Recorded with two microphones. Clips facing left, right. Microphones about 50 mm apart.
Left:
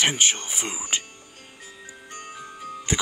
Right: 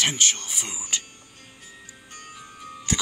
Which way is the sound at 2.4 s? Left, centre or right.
Centre.